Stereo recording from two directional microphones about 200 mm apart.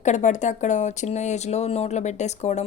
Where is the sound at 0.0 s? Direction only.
35° left (ahead or behind).